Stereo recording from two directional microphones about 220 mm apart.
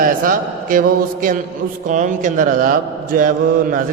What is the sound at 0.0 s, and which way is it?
A man's voice, 40° right (ahead or behind).